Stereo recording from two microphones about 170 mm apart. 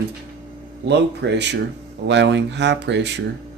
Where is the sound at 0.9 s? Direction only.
90° right.